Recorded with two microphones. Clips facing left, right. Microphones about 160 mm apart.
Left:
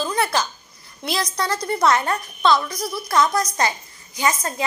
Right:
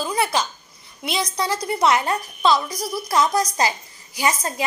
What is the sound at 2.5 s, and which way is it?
Speech, 35° right (ahead or behind).